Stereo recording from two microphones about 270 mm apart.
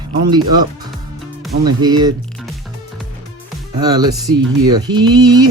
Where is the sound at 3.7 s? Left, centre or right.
Centre.